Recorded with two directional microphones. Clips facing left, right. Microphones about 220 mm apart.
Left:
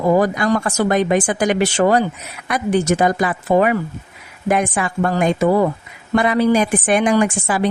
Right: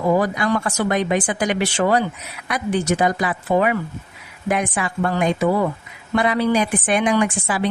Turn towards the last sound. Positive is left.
turn(degrees=45)  # may be behind; listen again after turning